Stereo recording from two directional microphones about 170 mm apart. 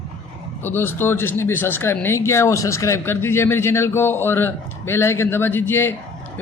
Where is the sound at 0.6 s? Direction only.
10° left (ahead or behind).